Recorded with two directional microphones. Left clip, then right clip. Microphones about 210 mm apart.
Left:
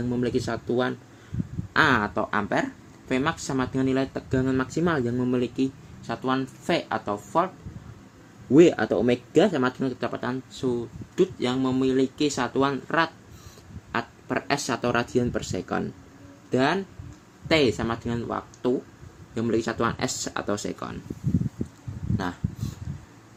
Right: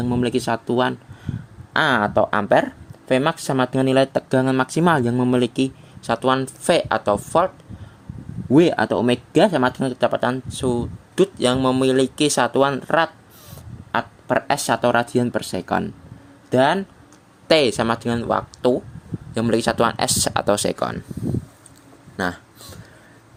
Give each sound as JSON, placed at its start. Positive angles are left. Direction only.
{"t": 0.1, "sound": "speech", "side_deg": -50}
{"t": 8.5, "sound": "speech", "side_deg": -50}